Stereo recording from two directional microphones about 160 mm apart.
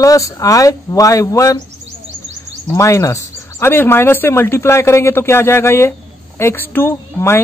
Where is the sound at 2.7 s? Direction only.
20° left (ahead or behind).